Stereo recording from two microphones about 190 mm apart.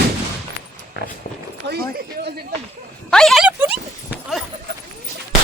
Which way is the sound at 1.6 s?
65° right (ahead or behind).